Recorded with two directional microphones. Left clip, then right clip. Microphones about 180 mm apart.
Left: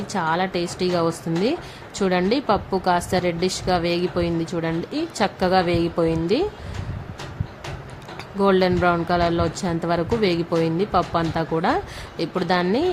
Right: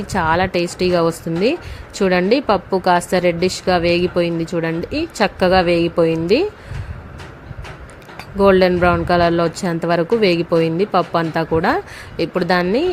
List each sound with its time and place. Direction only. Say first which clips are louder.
0.1 s speech: right 6 dB; 25° right (ahead or behind)
8.4 s speech: right 6 dB; 20° right (ahead or behind)